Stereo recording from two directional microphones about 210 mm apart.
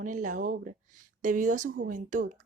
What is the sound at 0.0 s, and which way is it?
Speech, 40° right (ahead or behind).